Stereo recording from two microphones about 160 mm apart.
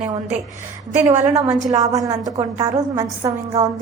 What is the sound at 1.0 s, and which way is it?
A woman's voice, 20° right (ahead or behind).